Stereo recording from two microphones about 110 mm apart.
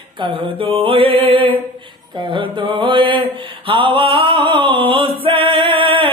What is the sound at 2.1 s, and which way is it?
Mantra, 45° right (ahead or behind).